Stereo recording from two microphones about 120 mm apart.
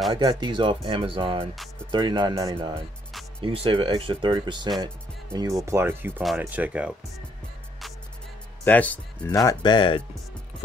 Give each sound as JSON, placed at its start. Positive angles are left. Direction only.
{"t": 0.1, "sound": "speech", "side_deg": -35}
{"t": 2.5, "sound": "speech", "side_deg": -45}
{"t": 5.3, "sound": "speech", "side_deg": -30}
{"t": 8.6, "sound": "speech", "side_deg": 15}
{"t": 9.3, "sound": "speech", "side_deg": 30}
{"t": 9.6, "sound": "speech", "side_deg": 45}